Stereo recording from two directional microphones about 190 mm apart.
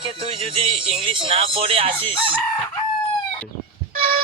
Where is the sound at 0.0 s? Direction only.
30° right (ahead or behind).